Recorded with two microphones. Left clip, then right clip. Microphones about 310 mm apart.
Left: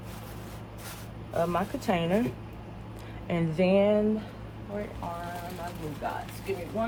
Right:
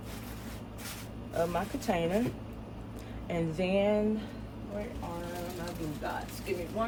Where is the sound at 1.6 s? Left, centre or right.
Left.